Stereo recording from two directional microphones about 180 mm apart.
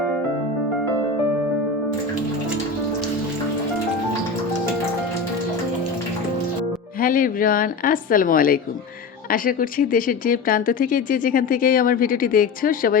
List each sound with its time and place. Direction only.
7.0 s speech: 50° left (ahead or behind)